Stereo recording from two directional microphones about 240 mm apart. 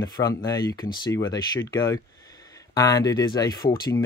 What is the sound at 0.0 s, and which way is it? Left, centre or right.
Speech, centre.